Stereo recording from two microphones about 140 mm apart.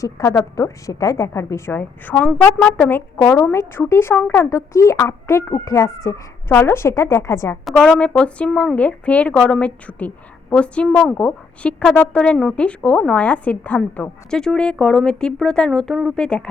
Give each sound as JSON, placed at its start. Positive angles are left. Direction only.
{"t": 0.0, "sound": "a woman's voice", "side_deg": 20}
{"t": 7.6, "sound": "a woman's voice", "side_deg": 0}